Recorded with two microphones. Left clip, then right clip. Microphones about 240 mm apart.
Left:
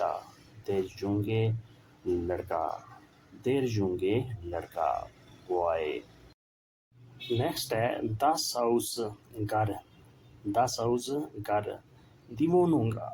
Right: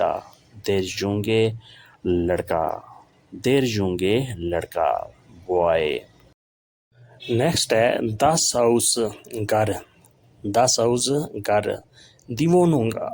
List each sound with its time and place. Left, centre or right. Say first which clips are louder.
0.6 s speech: right 9 dB; right
7.3 s speech: right 11 dB; right